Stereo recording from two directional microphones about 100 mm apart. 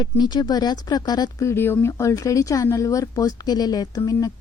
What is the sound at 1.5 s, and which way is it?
Speech, 25° left (ahead or behind).